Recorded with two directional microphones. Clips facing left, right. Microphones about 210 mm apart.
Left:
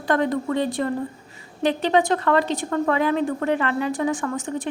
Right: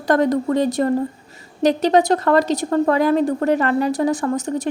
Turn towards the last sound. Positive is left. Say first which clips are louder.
# right 5 dB
turn(degrees=-40)  # may be behind; listen again after turning